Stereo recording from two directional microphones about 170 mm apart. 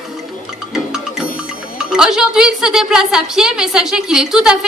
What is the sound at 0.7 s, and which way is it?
Music, 5° right (ahead or behind).